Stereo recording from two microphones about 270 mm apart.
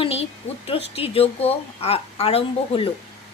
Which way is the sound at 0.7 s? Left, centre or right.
Left.